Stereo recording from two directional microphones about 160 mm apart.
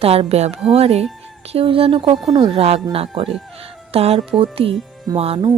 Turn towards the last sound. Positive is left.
turn(degrees=-35)  # may be behind; listen again after turning